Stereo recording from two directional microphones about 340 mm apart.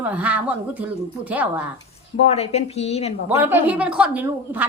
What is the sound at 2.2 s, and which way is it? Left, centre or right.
Speech, centre.